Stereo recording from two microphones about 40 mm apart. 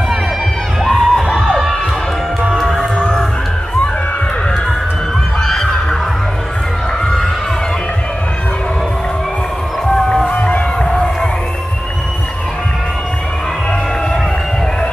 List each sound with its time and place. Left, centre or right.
0.8 s crowd: centre
2.5 s music: centre
2.8 s music: centre
5.4 s fowl: centre
9.8 s music: centre
10.8 s crowd: centre